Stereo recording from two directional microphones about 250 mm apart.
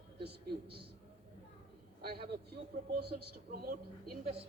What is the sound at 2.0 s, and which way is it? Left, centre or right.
A man's voice, right.